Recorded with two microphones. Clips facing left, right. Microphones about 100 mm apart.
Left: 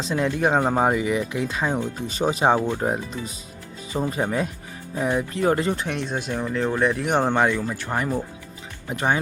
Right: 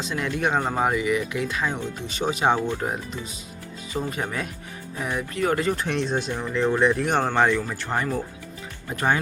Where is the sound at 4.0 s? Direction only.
25° left (ahead or behind).